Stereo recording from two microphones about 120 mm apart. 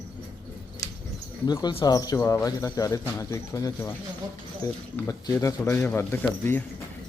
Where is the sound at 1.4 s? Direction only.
35° left (ahead or behind).